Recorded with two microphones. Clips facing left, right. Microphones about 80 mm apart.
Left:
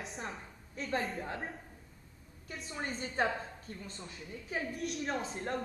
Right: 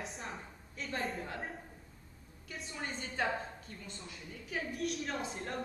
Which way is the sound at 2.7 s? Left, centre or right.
Left.